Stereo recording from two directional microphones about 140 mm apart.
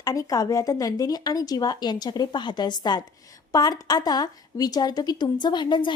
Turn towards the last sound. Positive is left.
turn(degrees=35)  # may be behind; listen again after turning